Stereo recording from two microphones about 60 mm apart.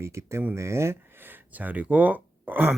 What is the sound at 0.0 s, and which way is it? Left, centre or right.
Speech, right.